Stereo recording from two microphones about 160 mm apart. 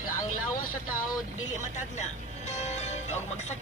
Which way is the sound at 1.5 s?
50° left (ahead or behind).